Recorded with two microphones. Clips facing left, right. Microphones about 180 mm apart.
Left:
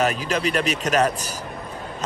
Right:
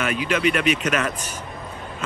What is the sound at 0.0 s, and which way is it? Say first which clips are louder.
Speech: even; 40° left (ahead or behind).